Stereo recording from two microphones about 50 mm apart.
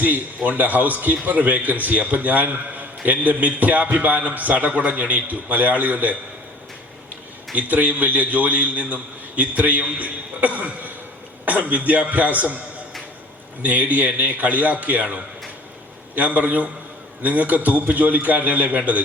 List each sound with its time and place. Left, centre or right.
0.3 s a man's voice: right
7.5 s a man's voice: right
13.6 s a man's voice: right